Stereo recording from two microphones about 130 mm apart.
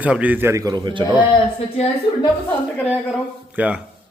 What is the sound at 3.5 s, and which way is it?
Speech, 10° right (ahead or behind).